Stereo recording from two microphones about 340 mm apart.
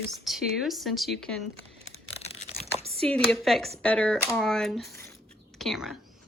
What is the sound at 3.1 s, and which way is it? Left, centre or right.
Speech, centre.